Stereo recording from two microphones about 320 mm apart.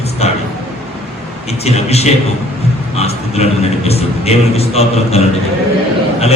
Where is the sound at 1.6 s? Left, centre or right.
Centre.